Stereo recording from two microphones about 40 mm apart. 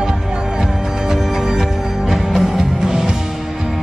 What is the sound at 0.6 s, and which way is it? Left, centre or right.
Music, centre.